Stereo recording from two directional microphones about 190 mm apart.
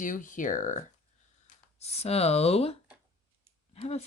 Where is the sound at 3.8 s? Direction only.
30° left (ahead or behind).